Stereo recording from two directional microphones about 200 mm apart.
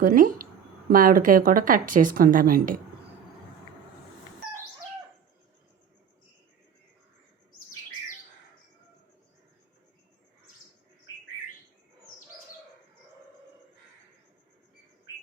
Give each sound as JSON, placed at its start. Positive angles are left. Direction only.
{"t": 0.0, "sound": "speech", "side_deg": -45}